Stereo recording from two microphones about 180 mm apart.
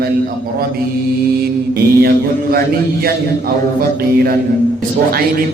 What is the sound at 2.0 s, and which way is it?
Mantra, 55° right (ahead or behind).